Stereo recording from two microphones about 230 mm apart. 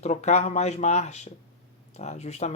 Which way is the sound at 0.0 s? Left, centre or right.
Left.